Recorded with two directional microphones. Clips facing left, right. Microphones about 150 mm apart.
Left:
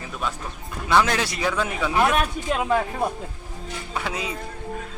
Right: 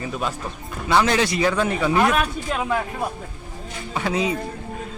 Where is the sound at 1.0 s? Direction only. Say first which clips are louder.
Right 5 dB; centre (ahead or behind).